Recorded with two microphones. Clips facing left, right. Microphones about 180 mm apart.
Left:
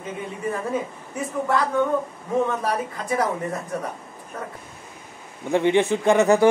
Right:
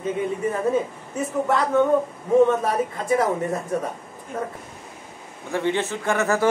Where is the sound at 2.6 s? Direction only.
25° right (ahead or behind).